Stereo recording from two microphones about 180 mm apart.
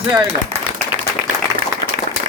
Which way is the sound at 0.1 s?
5° right (ahead or behind).